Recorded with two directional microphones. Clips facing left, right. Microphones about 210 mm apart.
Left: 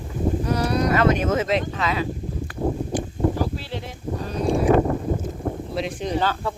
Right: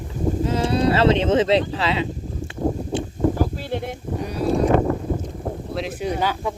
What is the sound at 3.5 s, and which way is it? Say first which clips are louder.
Speech: right 5 dB; 50° right (ahead or behind).